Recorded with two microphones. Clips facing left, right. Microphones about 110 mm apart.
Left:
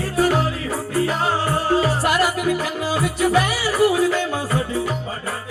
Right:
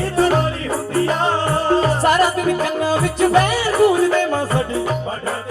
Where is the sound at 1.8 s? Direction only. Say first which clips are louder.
Right 4 dB; 45° right (ahead or behind).